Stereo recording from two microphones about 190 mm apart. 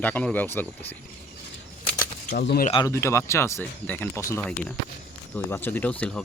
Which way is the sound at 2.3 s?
60° left (ahead or behind).